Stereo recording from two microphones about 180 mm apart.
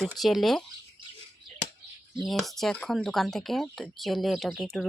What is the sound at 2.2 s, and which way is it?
Speech, centre (ahead or behind).